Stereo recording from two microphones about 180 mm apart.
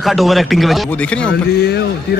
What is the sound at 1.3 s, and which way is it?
Speech, 65° left (ahead or behind).